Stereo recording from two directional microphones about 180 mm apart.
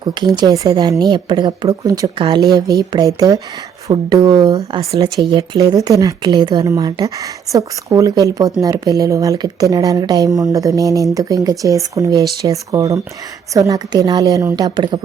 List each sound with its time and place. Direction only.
0.0 s speech: 25° right (ahead or behind)